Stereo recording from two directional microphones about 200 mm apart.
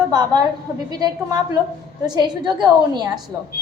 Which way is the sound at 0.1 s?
20° right (ahead or behind).